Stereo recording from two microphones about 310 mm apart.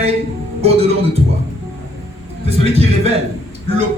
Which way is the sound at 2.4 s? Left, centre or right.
Centre.